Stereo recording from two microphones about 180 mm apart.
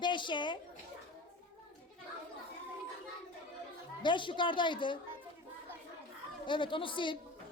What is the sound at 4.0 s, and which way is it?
A woman's voice, 25° left (ahead or behind).